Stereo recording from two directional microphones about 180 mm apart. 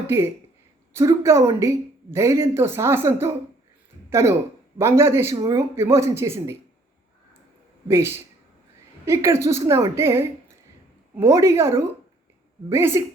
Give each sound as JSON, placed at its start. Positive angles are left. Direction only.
{"t": 0.9, "sound": "speech", "side_deg": -15}
{"t": 7.9, "sound": "speech", "side_deg": -15}